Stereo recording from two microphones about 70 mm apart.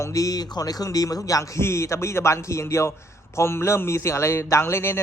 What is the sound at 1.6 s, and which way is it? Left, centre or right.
A man's voice, left.